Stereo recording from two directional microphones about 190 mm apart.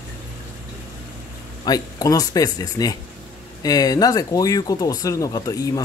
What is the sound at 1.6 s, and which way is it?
Speech, 20° left (ahead or behind).